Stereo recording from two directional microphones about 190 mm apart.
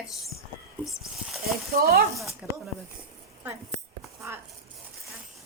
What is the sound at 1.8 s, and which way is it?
Speech, 50° right (ahead or behind).